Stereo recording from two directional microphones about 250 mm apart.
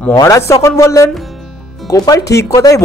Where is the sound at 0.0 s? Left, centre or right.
Centre.